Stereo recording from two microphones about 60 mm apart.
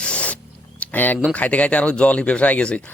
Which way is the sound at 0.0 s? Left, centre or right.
Centre.